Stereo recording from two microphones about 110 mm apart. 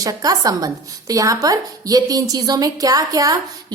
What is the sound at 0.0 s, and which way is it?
A woman's voice, 35° right (ahead or behind).